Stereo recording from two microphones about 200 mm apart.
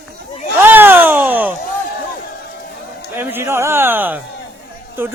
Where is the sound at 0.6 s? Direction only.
10° right (ahead or behind).